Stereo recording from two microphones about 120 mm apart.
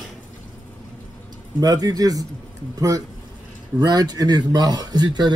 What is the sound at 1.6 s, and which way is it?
A man's voice, 30° right (ahead or behind).